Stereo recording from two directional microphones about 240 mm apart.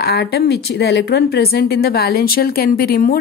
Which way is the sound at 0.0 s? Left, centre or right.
Left.